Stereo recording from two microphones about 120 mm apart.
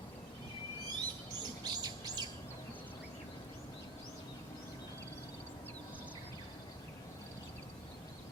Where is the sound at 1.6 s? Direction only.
35° right (ahead or behind).